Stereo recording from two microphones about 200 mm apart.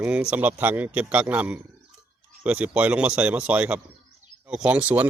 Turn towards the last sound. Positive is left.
turn(degrees=-5)  # may be behind; listen again after turning